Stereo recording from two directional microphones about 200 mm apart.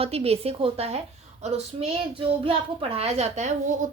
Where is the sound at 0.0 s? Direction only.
30° right (ahead or behind).